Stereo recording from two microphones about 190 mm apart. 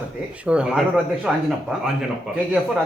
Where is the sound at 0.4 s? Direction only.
5° right (ahead or behind).